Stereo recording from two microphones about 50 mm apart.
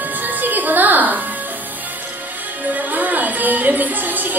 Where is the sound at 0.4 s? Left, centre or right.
Right.